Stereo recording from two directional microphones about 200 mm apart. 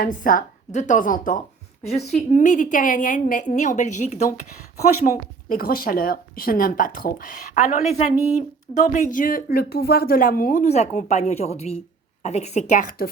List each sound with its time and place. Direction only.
0.0 s a woman's voice: 40° left (ahead or behind)